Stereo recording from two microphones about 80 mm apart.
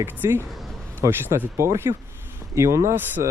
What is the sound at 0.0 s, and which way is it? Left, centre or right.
Speech, right.